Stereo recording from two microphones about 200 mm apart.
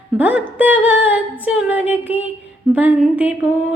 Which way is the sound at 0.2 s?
10° right (ahead or behind).